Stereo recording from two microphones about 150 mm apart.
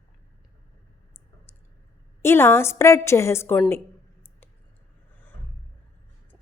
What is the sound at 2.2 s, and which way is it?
A woman's voice, 15° left (ahead or behind).